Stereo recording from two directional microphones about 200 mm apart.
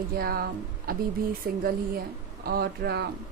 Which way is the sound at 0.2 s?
50° right (ahead or behind).